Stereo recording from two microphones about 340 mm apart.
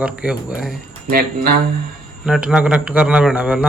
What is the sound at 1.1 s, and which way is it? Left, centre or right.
Speech, right.